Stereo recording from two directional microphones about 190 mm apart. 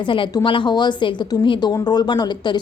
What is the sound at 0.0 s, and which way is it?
A woman's voice, 25° left (ahead or behind).